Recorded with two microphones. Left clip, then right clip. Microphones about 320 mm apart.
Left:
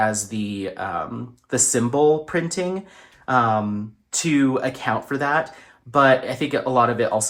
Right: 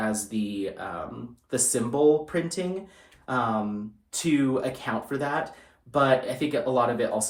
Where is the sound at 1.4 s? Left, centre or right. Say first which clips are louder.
Left 6 dB; left.